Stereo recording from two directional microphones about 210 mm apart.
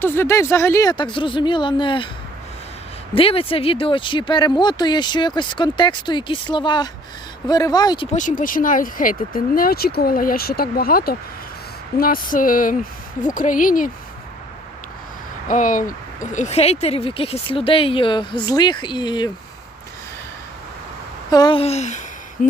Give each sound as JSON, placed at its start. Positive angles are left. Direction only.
{"t": 0.0, "sound": "speech", "side_deg": 10}
{"t": 3.2, "sound": "speech", "side_deg": 25}
{"t": 8.1, "sound": "speech", "side_deg": 35}
{"t": 15.4, "sound": "speech", "side_deg": 40}
{"t": 21.2, "sound": "speech", "side_deg": 20}
{"t": 22.4, "sound": "a sound", "side_deg": 40}